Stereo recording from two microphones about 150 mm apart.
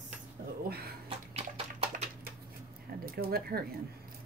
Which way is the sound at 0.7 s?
90° right.